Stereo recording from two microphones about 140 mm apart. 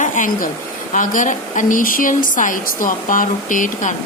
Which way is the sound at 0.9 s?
65° left (ahead or behind).